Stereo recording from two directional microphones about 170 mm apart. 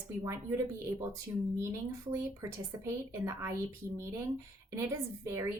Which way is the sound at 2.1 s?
15° right (ahead or behind).